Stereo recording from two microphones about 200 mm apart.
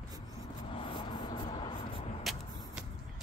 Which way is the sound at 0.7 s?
25° left (ahead or behind).